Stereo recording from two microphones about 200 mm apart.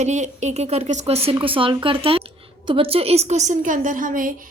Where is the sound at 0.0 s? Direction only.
35° right (ahead or behind).